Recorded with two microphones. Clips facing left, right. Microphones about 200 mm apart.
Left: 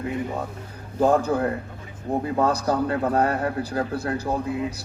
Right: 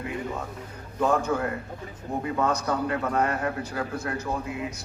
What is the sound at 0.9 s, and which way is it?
A man's voice, 35° left (ahead or behind).